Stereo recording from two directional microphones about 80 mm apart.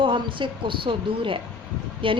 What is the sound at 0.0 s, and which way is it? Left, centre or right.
A woman's voice, right.